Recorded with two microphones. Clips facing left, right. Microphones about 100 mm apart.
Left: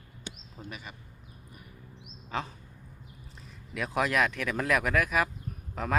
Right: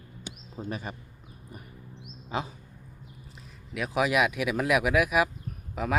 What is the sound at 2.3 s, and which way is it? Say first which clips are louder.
Speech: right 2 dB; 15° right (ahead or behind).